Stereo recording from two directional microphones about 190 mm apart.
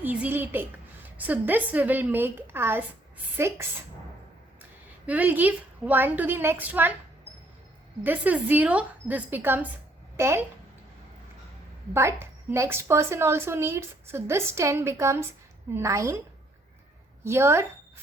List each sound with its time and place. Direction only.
0.0 s a woman's voice: 10° right (ahead or behind)
5.0 s a woman's voice: 10° right (ahead or behind)
8.0 s a woman's voice: 10° right (ahead or behind)
11.9 s a woman's voice: 15° right (ahead or behind)
17.2 s a woman's voice: 15° right (ahead or behind)